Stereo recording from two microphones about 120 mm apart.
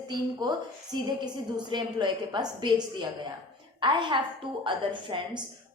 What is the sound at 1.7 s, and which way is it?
A woman's voice, 40° right (ahead or behind).